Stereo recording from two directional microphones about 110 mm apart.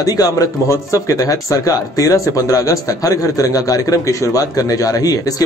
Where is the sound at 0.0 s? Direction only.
30° left (ahead or behind).